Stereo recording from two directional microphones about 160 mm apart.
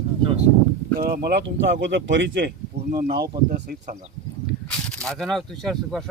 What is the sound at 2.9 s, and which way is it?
Speech, 70° right (ahead or behind).